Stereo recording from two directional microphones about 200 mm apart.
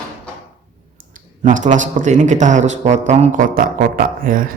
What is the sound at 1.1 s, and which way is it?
Speech, 40° right (ahead or behind).